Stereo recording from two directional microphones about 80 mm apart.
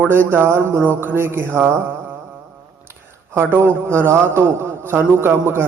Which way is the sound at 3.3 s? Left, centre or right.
Right.